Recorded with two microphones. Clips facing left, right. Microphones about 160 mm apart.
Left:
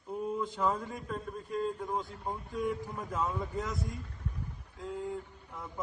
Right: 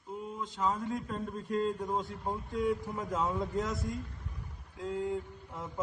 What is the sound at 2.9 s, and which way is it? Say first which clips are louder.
Speech: right 1 dB; 5° right (ahead or behind).